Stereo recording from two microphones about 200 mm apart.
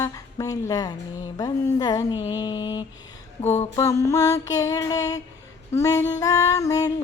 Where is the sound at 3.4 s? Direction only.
35° left (ahead or behind).